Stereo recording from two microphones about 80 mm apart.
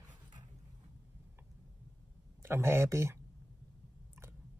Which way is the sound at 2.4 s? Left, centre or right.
Right.